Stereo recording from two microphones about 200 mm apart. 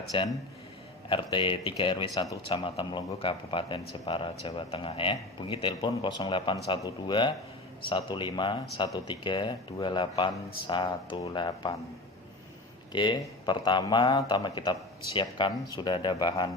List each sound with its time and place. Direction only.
0.1 s speech: 25° left (ahead or behind)
12.9 s speech: 25° left (ahead or behind)